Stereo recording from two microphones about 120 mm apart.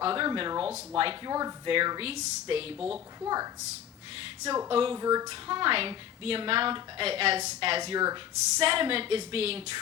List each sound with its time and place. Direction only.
0.0 s a woman's voice: 45° right (ahead or behind)
1.3 s speech: 30° right (ahead or behind)
1.6 s a woman's voice: 45° right (ahead or behind)
2.7 s a woman's voice: 5° right (ahead or behind)
3.2 s speech: 30° right (ahead or behind)
4.7 s a woman's voice: 50° right (ahead or behind)
4.9 s speech: 30° right (ahead or behind)
5.3 s a woman's voice: 45° right (ahead or behind)
7.9 s speech: 35° right (ahead or behind)
8.5 s a woman's voice: 50° right (ahead or behind)